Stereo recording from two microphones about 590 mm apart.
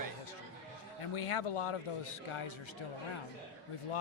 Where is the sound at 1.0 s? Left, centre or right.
Left.